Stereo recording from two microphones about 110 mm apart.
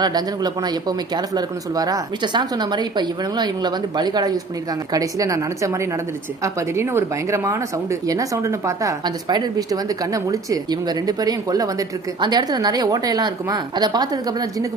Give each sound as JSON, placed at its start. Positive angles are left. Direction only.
{"t": 0.0, "sound": "speech", "side_deg": -40}